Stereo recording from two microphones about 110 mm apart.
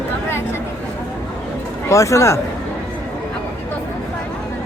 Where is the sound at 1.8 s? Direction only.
30° left (ahead or behind).